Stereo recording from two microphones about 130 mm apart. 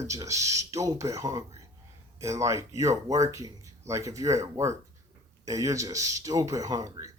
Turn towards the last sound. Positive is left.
turn(degrees=-25)  # may be behind; listen again after turning